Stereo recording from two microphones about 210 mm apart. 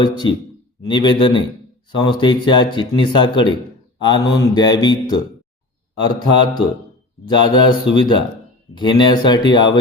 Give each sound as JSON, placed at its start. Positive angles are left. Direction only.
{"t": 0.0, "sound": "speech", "side_deg": 20}